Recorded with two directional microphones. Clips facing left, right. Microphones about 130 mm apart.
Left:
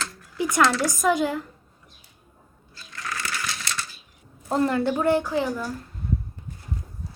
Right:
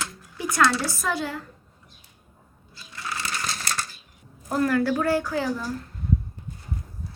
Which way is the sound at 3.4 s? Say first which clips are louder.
Right 1 dB; 40° right (ahead or behind).